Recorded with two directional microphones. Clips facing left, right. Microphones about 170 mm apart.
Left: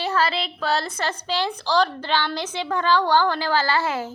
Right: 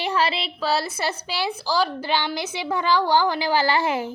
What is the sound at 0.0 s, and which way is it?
A child's voice, 15° right (ahead or behind).